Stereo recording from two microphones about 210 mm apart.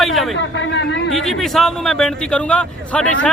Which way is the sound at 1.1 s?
Centre (ahead or behind).